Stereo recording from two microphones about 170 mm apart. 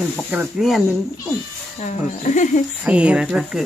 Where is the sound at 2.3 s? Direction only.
45° left (ahead or behind).